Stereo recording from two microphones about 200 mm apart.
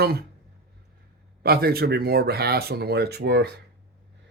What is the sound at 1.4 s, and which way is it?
Speech, 50° right (ahead or behind).